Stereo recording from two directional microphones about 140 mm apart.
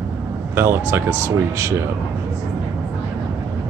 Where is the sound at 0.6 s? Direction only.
15° right (ahead or behind).